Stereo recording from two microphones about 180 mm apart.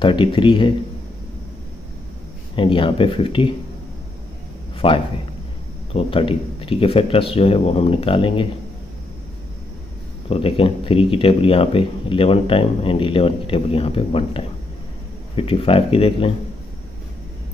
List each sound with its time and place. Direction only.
0.0 s speech: 25° left (ahead or behind)
2.5 s speech: 30° left (ahead or behind)
4.7 s a man's voice: 30° left (ahead or behind)
10.3 s speech: 30° left (ahead or behind)